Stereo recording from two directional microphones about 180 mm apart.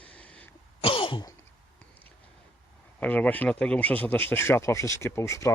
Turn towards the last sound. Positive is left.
turn(degrees=15)  # may be behind; listen again after turning